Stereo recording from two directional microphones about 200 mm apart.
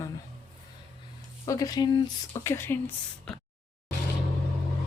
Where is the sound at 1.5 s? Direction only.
15° left (ahead or behind).